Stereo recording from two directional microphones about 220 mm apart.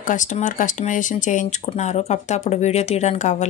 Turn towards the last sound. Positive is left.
turn(degrees=30)  # may be behind; listen again after turning